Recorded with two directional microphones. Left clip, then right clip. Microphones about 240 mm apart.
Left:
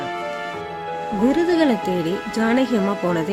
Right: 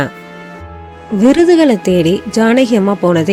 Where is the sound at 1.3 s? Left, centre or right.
Right.